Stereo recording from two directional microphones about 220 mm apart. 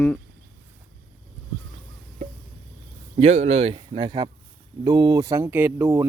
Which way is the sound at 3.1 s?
30° right (ahead or behind).